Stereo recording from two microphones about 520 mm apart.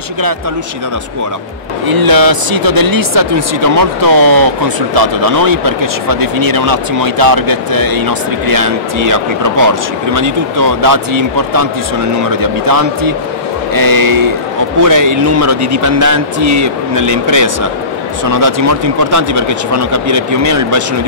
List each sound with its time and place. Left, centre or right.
1.9 s a man's voice: right